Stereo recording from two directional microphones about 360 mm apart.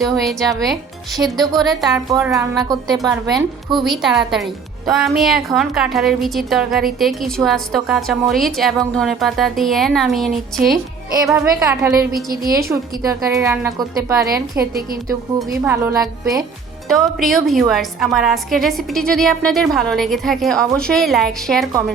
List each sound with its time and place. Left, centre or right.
0.0 s a woman's voice: centre
12.3 s a woman's voice: right
12.6 s a woman's voice: centre
15.6 s a woman's voice: centre